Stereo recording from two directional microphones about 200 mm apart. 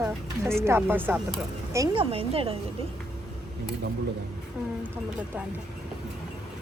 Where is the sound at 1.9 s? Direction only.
30° right (ahead or behind).